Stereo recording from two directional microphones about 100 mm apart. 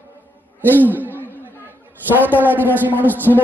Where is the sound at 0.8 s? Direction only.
20° right (ahead or behind).